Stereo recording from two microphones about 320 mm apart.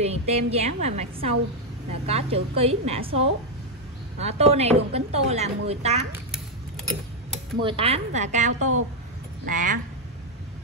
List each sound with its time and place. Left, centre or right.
0.0 s a woman's voice: centre
7.6 s a woman's voice: centre
8.5 s speech: right
9.5 s a woman's voice: right